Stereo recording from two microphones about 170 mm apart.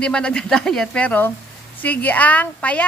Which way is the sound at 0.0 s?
5° left (ahead or behind).